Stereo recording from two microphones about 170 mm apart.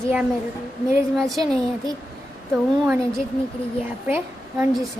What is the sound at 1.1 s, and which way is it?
Speech, centre (ahead or behind).